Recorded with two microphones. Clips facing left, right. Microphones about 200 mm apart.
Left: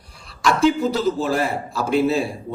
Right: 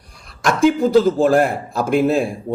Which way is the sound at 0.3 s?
50° right (ahead or behind).